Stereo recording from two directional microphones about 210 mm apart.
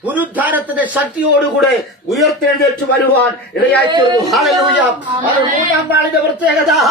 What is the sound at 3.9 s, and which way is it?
Speech, 20° right (ahead or behind).